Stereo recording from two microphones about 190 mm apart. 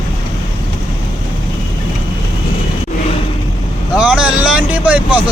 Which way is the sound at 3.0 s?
30° left (ahead or behind).